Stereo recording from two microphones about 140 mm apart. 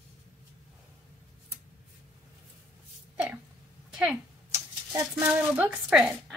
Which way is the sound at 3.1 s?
10° right (ahead or behind).